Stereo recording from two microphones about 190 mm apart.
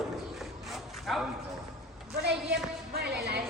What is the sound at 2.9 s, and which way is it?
Music, 60° right (ahead or behind).